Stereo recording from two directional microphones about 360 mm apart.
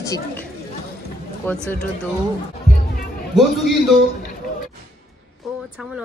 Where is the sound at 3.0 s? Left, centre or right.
Centre.